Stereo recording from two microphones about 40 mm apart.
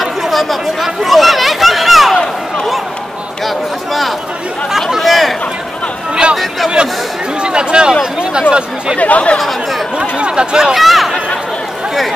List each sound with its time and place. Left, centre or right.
0.0 s chatter: centre
1.0 s a sound: centre
3.4 s a sound: centre
4.7 s chatter: centre
7.4 s speech: right
8.9 s speech: left
9.9 s speech: right
10.7 s speech: centre